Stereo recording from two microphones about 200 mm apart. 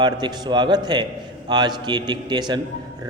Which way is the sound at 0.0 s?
20° right (ahead or behind).